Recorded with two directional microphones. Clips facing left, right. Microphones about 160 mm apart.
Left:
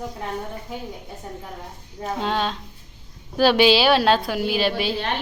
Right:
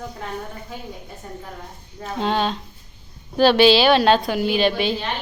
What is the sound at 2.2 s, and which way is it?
A woman's voice, centre (ahead or behind).